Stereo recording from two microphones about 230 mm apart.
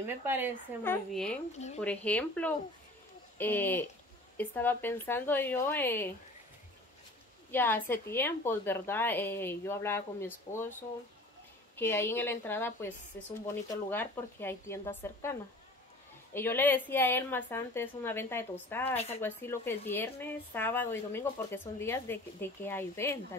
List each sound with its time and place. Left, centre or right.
0.0 s speech: centre
0.8 s a woman's voice: centre
7.5 s speech: centre
16.3 s speech: centre
18.9 s speech: left
19.2 s speech: centre